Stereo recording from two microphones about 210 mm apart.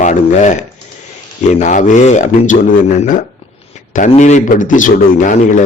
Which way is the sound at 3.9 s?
35° left (ahead or behind).